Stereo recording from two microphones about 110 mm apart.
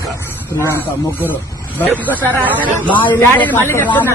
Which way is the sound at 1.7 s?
15° left (ahead or behind).